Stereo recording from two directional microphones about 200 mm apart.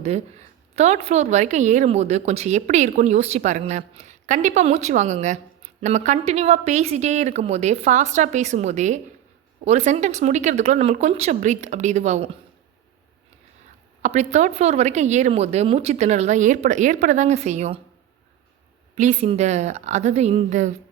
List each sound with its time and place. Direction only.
0.0 s a woman's voice: 35° right (ahead or behind)
14.0 s a woman's voice: 35° right (ahead or behind)
18.9 s a woman's voice: 35° right (ahead or behind)